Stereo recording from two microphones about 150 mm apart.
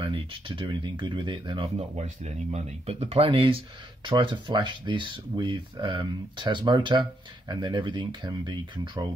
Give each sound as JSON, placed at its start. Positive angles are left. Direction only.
{"t": 0.0, "sound": "speech", "side_deg": -35}
{"t": 1.8, "sound": "speech", "side_deg": -45}